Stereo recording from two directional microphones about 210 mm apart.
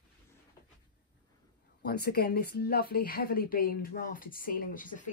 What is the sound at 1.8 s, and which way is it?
Speech, 50° left (ahead or behind).